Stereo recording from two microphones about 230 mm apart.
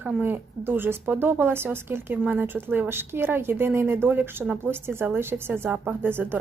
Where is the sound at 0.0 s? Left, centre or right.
Centre.